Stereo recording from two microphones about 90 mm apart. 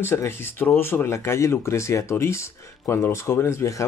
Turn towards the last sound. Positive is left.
turn(degrees=30)  # may be behind; listen again after turning